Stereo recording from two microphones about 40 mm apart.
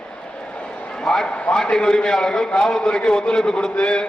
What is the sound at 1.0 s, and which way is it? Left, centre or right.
Speech, centre.